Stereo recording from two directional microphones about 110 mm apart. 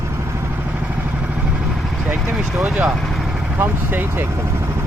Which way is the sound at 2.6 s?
10° right (ahead or behind).